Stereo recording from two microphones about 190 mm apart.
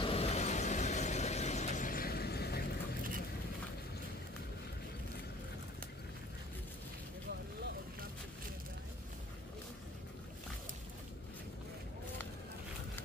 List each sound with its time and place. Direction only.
0.0 s vehicle: 30° left (ahead or behind); by 3.0 s 55° left (ahead or behind)